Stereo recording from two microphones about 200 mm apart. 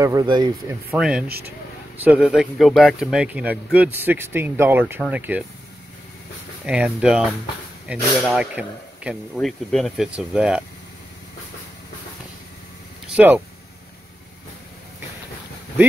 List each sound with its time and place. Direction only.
0.0 s speech: 15° right (ahead or behind)
0.9 s speech: 5° right (ahead or behind)
6.6 s speech: 5° right (ahead or behind)
13.0 s a sound: 5° right (ahead or behind)